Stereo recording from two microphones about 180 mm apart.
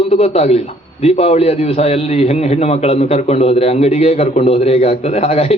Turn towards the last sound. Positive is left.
turn(degrees=35)  # may be behind; listen again after turning